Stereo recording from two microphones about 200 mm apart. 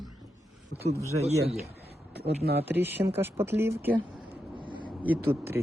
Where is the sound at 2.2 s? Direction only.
55° right (ahead or behind).